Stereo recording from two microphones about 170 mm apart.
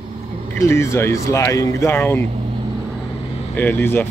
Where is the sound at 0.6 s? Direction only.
15° left (ahead or behind).